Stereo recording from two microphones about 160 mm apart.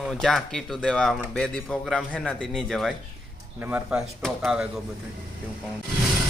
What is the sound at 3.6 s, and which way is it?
Speech, 10° right (ahead or behind).